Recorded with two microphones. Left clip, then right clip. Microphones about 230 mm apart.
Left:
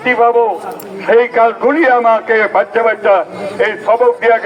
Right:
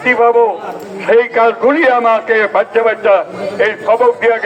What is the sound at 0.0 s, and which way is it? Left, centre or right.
A man's voice, right.